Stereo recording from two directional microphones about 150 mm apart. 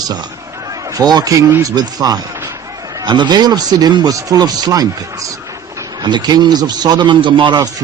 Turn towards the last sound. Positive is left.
turn(degrees=-30)  # may be behind; listen again after turning